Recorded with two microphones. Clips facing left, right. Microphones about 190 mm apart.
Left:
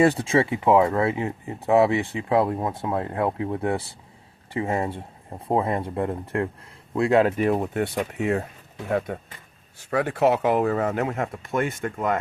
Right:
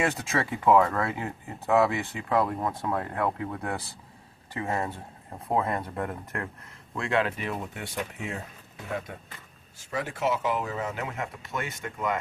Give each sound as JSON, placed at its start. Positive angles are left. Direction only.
{"t": 0.0, "sound": "speech", "side_deg": 30}